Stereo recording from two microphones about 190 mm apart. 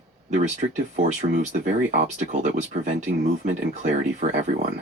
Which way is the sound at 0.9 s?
40° right (ahead or behind).